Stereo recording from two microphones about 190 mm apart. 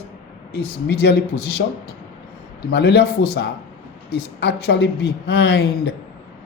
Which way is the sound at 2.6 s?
65° left (ahead or behind).